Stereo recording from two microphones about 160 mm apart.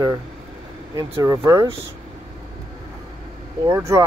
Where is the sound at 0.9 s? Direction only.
20° right (ahead or behind).